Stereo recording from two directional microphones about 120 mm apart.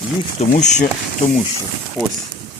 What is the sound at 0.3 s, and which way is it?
Speech, 80° left.